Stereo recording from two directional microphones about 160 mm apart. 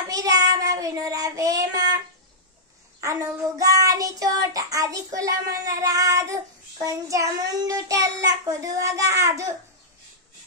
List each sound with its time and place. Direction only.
0.1 s child singing: 20° right (ahead or behind)
3.0 s child singing: 20° right (ahead or behind)